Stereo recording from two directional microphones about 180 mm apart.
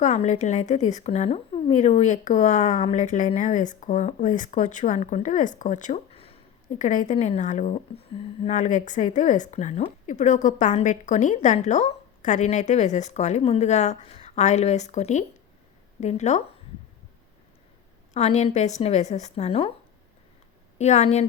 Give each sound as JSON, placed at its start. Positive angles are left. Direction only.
{"t": 0.0, "sound": "a woman's voice", "side_deg": 40}
{"t": 6.7, "sound": "a woman's voice", "side_deg": 45}
{"t": 18.1, "sound": "a woman's voice", "side_deg": 40}
{"t": 20.7, "sound": "a woman's voice", "side_deg": 40}